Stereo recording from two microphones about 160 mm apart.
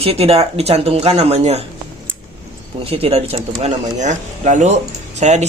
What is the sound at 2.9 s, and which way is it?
Speech, 35° right (ahead or behind).